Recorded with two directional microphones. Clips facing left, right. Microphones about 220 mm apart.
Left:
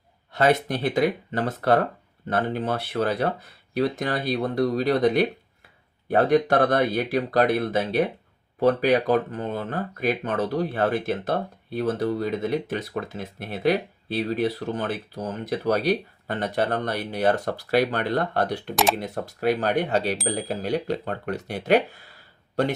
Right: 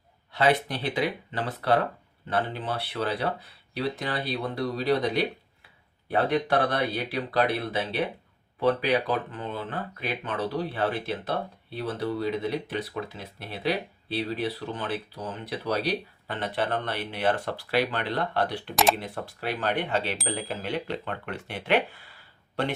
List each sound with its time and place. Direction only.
0.3 s speech: 45° left (ahead or behind)
18.7 s speech: centre (ahead or behind)
18.9 s speech: 40° left (ahead or behind)